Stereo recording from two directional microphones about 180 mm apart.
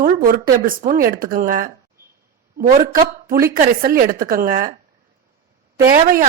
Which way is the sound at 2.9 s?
55° right (ahead or behind).